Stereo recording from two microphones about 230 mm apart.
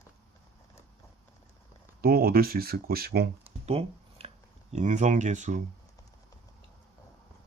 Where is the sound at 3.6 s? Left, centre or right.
Right.